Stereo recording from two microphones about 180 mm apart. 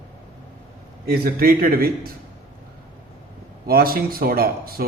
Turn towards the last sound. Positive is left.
turn(degrees=-55)  # may be behind; listen again after turning